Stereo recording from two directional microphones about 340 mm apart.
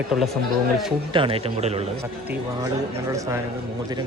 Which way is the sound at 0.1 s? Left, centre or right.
Centre.